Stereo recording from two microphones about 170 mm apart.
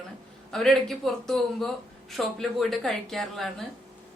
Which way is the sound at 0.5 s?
Centre (ahead or behind).